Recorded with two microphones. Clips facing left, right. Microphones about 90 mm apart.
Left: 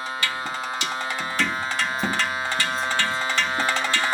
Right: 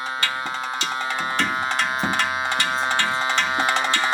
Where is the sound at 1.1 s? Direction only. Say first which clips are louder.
Right 3 dB; 55° right (ahead or behind).